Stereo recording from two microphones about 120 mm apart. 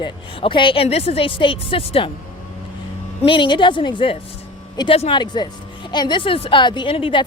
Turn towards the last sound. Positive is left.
turn(degrees=45)  # may be behind; listen again after turning